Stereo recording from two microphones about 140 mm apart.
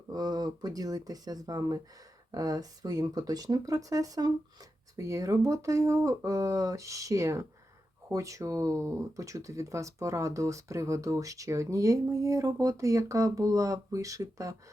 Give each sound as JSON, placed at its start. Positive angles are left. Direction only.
{"t": 0.1, "sound": "speech", "side_deg": -30}